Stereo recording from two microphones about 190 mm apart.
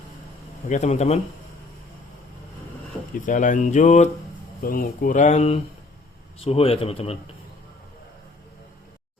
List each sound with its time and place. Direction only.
0.7 s speech: 35° left (ahead or behind)
3.2 s speech: 45° left (ahead or behind)
4.6 s speech: 50° left (ahead or behind); by 7.2 s 30° left (ahead or behind)